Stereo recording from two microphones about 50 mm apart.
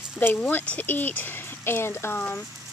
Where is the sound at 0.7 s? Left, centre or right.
Left.